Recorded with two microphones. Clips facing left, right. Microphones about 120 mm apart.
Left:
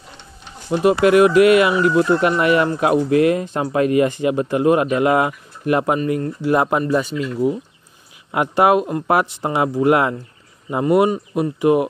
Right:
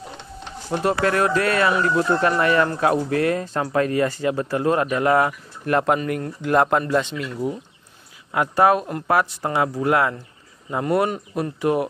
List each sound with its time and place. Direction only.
0.9 s speech: 15° left (ahead or behind)
8.3 s speech: 20° left (ahead or behind)